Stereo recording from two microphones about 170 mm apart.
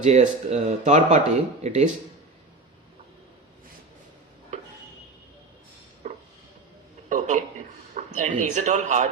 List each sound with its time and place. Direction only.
0.0 s speech: 40° right (ahead or behind)
7.1 s a sound: 50° right (ahead or behind)
7.9 s speech: 45° right (ahead or behind)